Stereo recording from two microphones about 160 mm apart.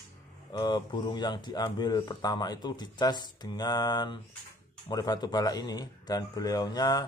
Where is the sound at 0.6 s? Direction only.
30° left (ahead or behind).